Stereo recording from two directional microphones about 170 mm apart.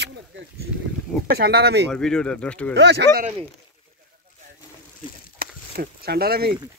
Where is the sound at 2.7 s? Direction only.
85° right.